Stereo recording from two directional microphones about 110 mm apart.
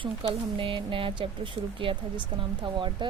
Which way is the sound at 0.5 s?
55° right (ahead or behind).